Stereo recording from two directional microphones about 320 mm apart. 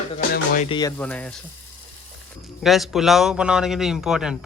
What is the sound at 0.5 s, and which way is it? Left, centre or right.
Speech, centre.